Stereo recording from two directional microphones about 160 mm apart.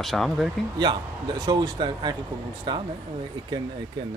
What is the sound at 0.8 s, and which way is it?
A man's voice, 25° right (ahead or behind).